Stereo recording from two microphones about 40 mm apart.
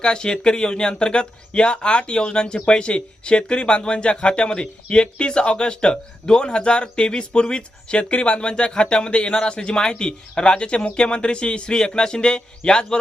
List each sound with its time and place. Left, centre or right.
0.0 s speech: left